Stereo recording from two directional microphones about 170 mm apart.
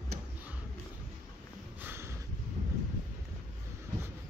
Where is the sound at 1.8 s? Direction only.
15° right (ahead or behind).